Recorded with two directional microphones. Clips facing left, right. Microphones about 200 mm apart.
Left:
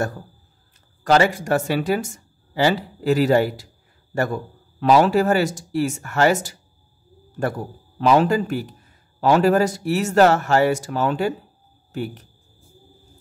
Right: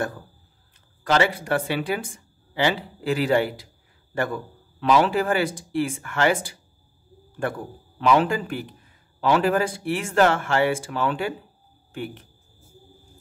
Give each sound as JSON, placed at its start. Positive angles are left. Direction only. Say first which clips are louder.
{"t": 1.0, "sound": "speech", "louder": "left 4 dB", "side_deg": 40}
{"t": 4.7, "sound": "speech", "louder": "left 4 dB", "side_deg": 40}
{"t": 8.0, "sound": "speech", "louder": "left 3 dB", "side_deg": 40}